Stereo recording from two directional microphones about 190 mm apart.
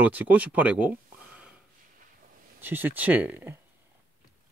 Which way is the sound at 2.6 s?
10° right (ahead or behind).